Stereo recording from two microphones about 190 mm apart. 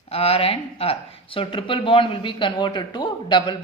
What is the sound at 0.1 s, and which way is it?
Speech, 30° left (ahead or behind).